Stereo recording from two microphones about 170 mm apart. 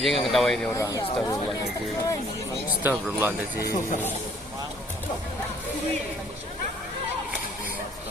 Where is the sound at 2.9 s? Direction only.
10° right (ahead or behind).